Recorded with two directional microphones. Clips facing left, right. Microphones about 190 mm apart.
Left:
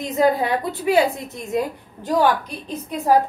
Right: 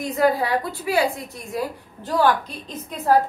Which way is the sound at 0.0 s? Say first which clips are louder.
Left 1 dB; 20° left (ahead or behind).